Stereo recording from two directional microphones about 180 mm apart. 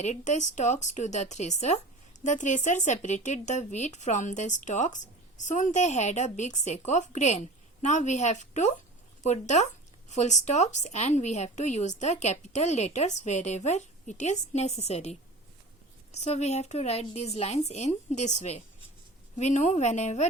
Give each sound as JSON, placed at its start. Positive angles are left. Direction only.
{"t": 0.0, "sound": "speech", "side_deg": 40}
{"t": 16.1, "sound": "speech", "side_deg": 40}